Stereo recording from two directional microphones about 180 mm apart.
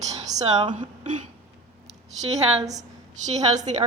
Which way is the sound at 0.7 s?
45° right (ahead or behind).